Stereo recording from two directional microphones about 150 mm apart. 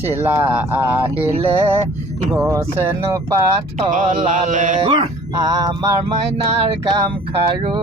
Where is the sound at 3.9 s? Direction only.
55° right (ahead or behind).